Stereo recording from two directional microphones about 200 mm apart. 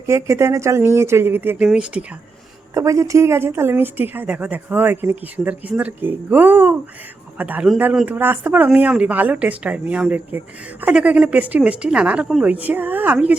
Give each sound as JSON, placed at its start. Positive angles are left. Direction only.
{"t": 0.1, "sound": "speech", "side_deg": -15}